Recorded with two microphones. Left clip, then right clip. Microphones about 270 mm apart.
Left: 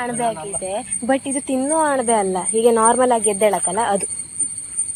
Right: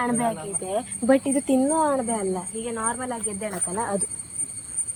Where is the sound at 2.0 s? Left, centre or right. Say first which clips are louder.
Left 9 dB; centre.